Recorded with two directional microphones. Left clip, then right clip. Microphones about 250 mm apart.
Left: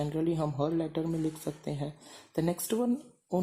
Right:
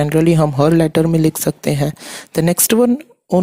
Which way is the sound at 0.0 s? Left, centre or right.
Right.